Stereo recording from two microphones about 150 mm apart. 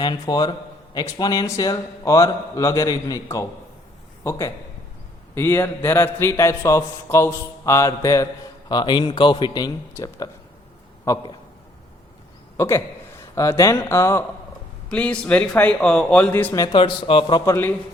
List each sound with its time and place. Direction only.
0.0 s a man's voice: 25° left (ahead or behind)
12.5 s a man's voice: 20° left (ahead or behind)
16.7 s a man's voice: 35° left (ahead or behind)
17.4 s a man's voice: 15° left (ahead or behind)